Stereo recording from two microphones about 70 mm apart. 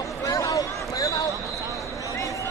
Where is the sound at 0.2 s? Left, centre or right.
Left.